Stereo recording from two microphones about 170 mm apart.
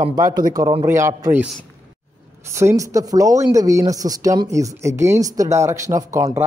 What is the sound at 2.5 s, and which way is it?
Speech, 15° right (ahead or behind).